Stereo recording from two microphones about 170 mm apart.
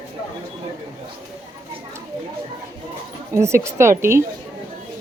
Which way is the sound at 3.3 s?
15° right (ahead or behind).